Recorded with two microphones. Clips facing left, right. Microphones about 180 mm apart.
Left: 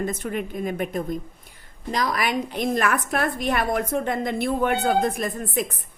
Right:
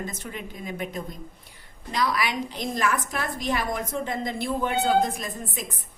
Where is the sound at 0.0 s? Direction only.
55° left (ahead or behind).